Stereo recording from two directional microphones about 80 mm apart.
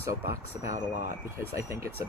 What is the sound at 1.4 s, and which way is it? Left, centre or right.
Speech, right.